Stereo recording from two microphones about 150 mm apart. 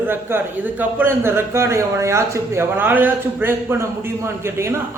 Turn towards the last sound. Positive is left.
turn(degrees=-20)  # may be behind; listen again after turning